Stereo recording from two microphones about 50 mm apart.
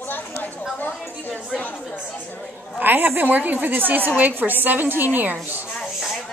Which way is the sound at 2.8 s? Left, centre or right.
Right.